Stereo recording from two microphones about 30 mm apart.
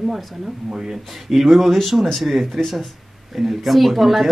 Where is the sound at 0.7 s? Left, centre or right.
Centre.